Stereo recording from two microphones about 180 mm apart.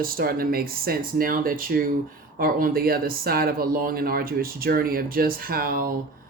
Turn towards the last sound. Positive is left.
turn(degrees=-55)  # may be behind; listen again after turning